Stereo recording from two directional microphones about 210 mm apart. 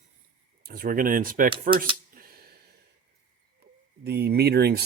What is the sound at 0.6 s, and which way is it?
Speech, 45° right (ahead or behind).